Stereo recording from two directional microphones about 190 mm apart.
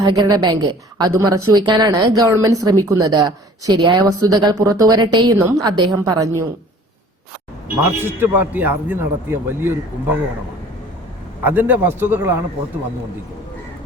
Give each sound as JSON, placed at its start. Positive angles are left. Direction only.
{"t": 0.0, "sound": "a woman's voice", "side_deg": -20}
{"t": 7.8, "sound": "a man's voice", "side_deg": -10}
{"t": 11.4, "sound": "a man's voice", "side_deg": -10}